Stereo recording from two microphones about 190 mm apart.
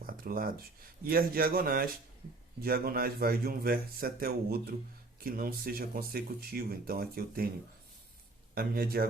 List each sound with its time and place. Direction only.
0.0 s speech: 50° right (ahead or behind)
8.5 s speech: 55° right (ahead or behind)